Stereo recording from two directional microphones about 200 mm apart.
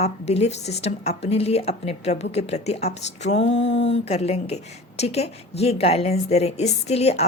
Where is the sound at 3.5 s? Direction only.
65° left (ahead or behind).